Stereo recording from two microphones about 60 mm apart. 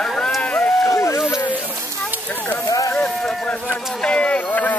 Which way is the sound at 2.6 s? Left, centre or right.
Left.